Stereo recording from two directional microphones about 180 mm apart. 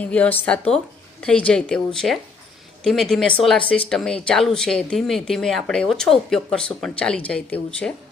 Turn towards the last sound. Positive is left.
turn(degrees=5)  # may be behind; listen again after turning